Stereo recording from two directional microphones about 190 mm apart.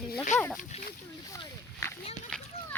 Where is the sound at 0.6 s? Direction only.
40° left (ahead or behind).